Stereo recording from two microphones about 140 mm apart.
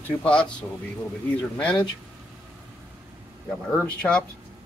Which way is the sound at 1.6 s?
10° left (ahead or behind).